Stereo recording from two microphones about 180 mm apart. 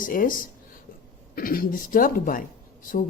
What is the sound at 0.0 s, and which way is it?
Speech, 50° left (ahead or behind).